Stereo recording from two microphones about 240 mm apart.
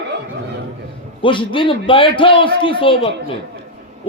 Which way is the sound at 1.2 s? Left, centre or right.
Left.